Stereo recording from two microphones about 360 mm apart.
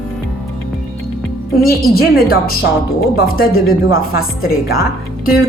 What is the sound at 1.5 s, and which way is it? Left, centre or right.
A woman's voice, left.